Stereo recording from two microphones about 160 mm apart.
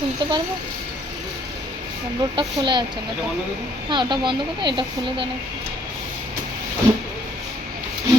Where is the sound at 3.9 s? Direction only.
30° right (ahead or behind).